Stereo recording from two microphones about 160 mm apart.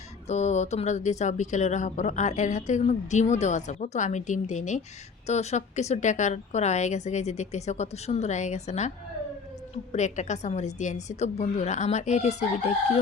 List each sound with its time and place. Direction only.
0.3 s speech: 45° left (ahead or behind)